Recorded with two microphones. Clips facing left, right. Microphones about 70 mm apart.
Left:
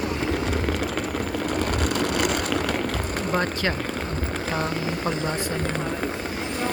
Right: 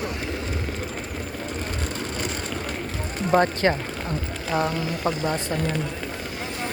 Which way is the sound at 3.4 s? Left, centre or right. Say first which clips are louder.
Right 4 dB; right.